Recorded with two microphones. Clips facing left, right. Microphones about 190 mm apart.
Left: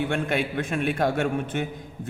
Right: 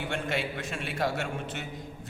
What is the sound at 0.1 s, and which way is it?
A man's voice, 55° left (ahead or behind).